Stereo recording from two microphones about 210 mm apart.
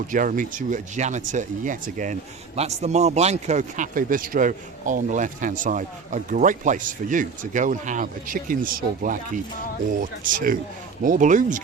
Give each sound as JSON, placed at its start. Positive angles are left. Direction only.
{"t": 0.1, "sound": "speech", "side_deg": -40}